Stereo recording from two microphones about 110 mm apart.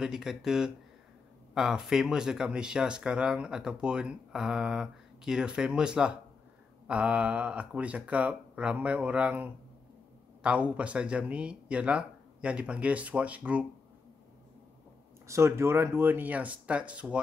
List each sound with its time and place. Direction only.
0.0 s speech: 5° right (ahead or behind)
15.2 s speech: 25° right (ahead or behind)